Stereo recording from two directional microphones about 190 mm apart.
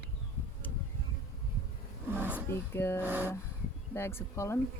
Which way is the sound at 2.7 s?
10° left (ahead or behind).